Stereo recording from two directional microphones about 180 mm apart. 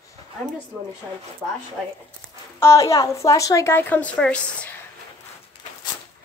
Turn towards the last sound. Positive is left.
turn(degrees=5)  # may be behind; listen again after turning